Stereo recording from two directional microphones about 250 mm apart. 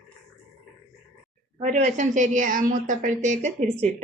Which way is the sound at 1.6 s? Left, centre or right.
Right.